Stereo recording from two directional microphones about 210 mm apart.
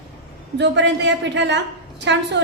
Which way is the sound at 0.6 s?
55° right (ahead or behind).